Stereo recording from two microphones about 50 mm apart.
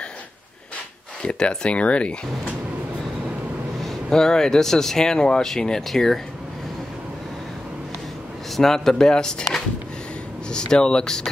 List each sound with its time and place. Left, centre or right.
1.2 s speech: centre
3.8 s speech: centre
8.5 s speech: centre